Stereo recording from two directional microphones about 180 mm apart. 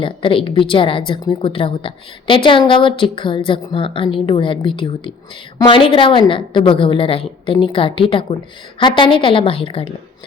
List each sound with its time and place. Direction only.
0.0 s a woman's voice: 30° left (ahead or behind)